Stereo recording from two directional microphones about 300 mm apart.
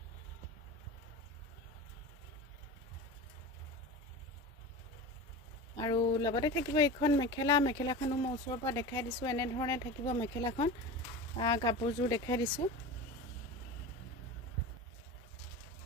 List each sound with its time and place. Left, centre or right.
5.8 s speech: centre